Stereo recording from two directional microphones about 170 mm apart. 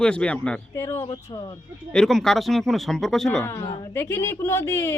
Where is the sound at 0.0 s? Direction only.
5° left (ahead or behind); by 1.5 s 20° left (ahead or behind).